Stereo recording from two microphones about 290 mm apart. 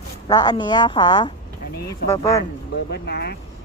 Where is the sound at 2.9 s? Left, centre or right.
Left.